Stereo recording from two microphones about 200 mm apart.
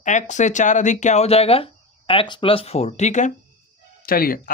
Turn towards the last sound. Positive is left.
turn(degrees=45)  # may be behind; listen again after turning